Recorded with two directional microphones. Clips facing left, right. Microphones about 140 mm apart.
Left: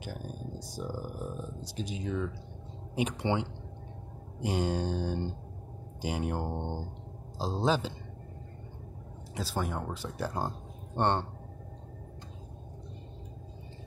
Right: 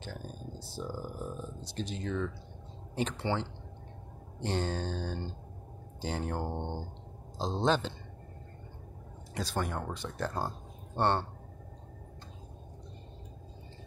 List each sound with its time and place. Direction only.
0.0 s speech: 10° left (ahead or behind)
9.3 s speech: 5° left (ahead or behind)